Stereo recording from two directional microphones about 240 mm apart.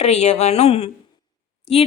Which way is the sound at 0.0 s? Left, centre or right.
Left.